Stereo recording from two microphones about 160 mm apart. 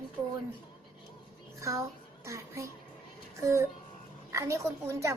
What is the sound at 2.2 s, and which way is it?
A woman's voice, 20° right (ahead or behind).